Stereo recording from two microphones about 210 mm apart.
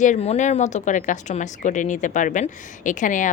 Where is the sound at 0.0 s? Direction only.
35° left (ahead or behind).